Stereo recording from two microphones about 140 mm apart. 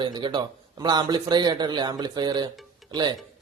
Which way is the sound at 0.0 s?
35° right (ahead or behind).